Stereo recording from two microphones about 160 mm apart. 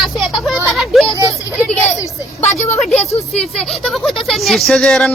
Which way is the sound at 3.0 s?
40° left (ahead or behind).